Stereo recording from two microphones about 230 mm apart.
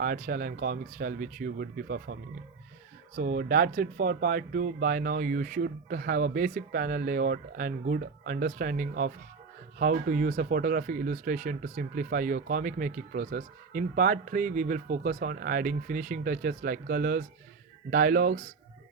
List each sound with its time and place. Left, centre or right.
0.0 s speech: right
3.2 s speech: right